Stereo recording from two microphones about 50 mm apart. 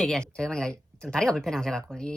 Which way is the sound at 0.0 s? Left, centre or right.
Centre.